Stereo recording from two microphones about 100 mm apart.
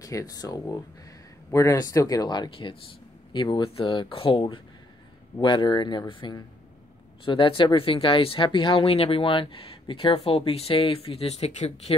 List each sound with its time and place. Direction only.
0.0 s speech: 35° left (ahead or behind)
7.2 s speech: 60° left (ahead or behind)
8.8 s speech: 75° left (ahead or behind)